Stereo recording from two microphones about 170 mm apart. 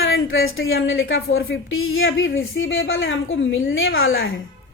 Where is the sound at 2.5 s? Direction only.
90° left.